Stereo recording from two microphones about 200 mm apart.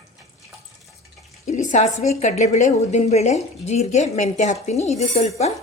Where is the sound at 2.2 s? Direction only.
35° left (ahead or behind).